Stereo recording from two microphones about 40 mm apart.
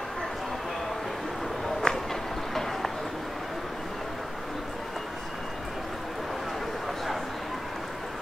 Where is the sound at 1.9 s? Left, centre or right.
Left.